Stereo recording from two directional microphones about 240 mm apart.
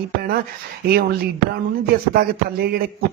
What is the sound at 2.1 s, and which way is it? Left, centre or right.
Speech, right.